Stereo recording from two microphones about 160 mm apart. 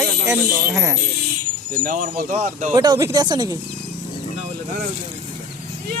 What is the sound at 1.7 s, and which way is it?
Speech, 55° right (ahead or behind).